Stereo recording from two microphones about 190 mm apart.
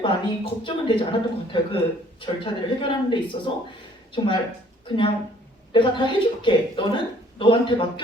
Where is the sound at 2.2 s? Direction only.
25° left (ahead or behind).